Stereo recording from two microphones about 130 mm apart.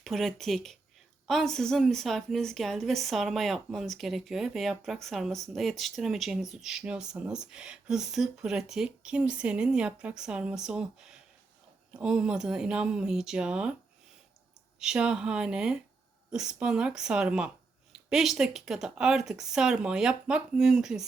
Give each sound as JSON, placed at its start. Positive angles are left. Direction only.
{"t": 0.0, "sound": "a woman's voice", "side_deg": 0}
{"t": 14.8, "sound": "a woman's voice", "side_deg": -5}